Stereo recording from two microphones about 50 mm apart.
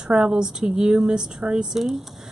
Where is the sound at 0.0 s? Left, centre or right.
Centre.